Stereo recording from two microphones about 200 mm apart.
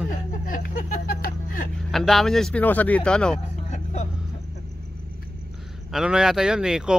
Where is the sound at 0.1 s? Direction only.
40° left (ahead or behind).